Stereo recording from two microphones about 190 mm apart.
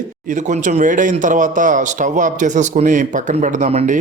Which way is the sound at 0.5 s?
40° right (ahead or behind).